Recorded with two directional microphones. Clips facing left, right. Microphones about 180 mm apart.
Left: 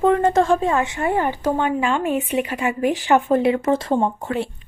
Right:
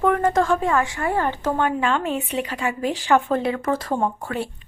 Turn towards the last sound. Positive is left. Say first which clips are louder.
# left 3 dB
turn(degrees=20)  # may be behind; listen again after turning